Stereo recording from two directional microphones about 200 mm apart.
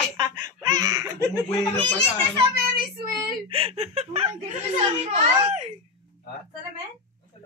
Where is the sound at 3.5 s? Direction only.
30° right (ahead or behind).